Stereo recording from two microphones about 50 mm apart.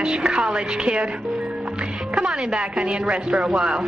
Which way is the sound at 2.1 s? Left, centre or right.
Right.